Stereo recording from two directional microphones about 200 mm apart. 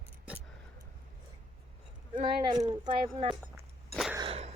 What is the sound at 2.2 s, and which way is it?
Speech, 20° right (ahead or behind).